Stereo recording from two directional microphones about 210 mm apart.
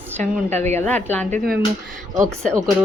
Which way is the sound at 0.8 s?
5° left (ahead or behind).